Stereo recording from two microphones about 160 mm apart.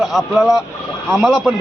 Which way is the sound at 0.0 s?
Centre (ahead or behind).